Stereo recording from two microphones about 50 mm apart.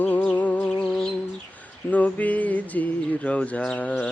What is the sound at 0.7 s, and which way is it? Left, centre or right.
Music, left.